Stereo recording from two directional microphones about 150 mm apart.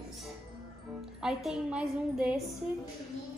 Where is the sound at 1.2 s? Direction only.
5° right (ahead or behind).